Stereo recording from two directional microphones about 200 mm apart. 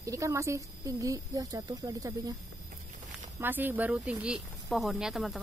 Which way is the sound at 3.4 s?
10° right (ahead or behind).